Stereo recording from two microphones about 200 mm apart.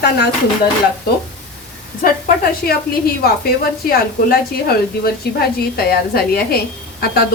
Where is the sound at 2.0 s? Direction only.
45° left (ahead or behind).